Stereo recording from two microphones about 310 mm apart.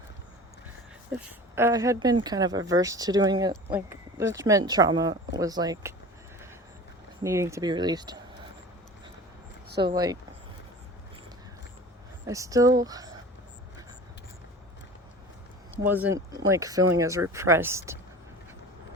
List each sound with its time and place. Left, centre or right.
1.1 s speech: centre
7.2 s speech: centre
9.6 s a sound: right
9.9 s speech: centre
12.2 s speech: centre
15.8 s speech: centre